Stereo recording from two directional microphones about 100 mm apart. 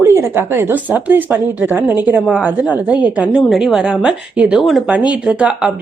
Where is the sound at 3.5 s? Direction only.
5° right (ahead or behind).